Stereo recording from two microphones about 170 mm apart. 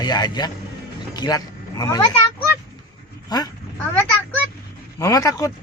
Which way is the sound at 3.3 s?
25° left (ahead or behind).